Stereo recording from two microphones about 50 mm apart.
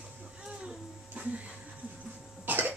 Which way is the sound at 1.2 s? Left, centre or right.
Right.